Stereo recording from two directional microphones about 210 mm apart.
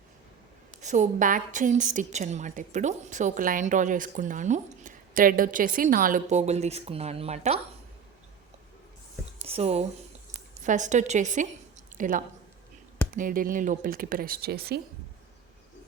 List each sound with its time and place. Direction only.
0.8 s a woman's voice: 35° right (ahead or behind)
9.5 s a woman's voice: 30° right (ahead or behind); by 14.8 s 45° right (ahead or behind)